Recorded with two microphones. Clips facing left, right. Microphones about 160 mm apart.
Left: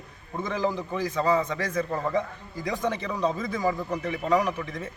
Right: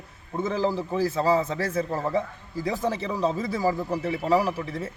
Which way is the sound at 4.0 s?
30° right (ahead or behind).